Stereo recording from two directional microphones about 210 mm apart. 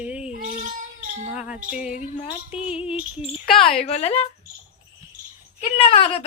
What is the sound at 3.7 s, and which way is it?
Speech, 30° left (ahead or behind).